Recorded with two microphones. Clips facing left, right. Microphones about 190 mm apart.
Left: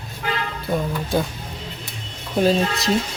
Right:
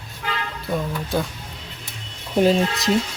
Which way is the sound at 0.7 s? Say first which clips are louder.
Left 2 dB; 5° left (ahead or behind).